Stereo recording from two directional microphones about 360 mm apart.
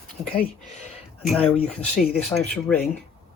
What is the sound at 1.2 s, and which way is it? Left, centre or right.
Speech, centre.